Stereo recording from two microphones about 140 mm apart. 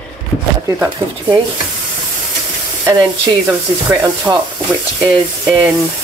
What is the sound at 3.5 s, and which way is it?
Speech, 15° right (ahead or behind).